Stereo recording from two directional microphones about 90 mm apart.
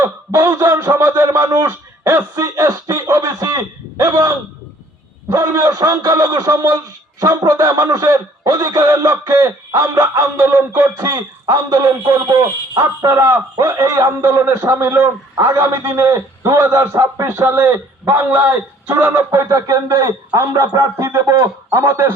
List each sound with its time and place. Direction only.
0.0 s a man's voice: 35° right (ahead or behind)
11.0 s a man's voice: 40° right (ahead or behind); by 19.1 s 25° right (ahead or behind)
19.1 s a man's voice: 40° right (ahead or behind)